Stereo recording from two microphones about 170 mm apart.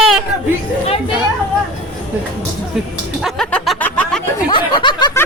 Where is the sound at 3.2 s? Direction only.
Centre (ahead or behind).